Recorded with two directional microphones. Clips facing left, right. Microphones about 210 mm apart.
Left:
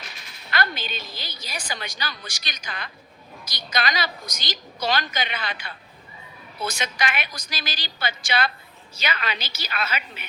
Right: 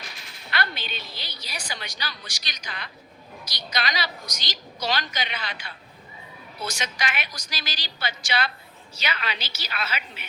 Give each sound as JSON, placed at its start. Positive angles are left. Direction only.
{"t": 0.5, "sound": "a woman's voice", "side_deg": 45}